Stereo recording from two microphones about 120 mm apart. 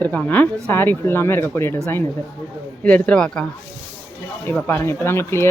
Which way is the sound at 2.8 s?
10° left (ahead or behind).